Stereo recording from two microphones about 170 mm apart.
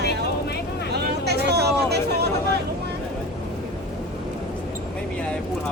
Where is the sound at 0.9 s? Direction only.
75° right (ahead or behind).